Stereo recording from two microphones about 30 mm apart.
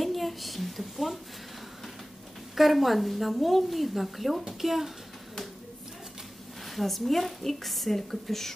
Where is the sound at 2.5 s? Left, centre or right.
Centre.